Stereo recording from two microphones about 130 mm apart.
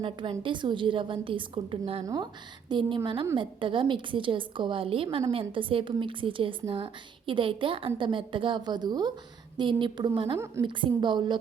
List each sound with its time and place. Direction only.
0.0 s a woman's voice: 40° right (ahead or behind)
2.0 s a woman's voice: 30° right (ahead or behind)
10.3 s a woman's voice: 20° right (ahead or behind)
10.6 s a woman's voice: 40° right (ahead or behind)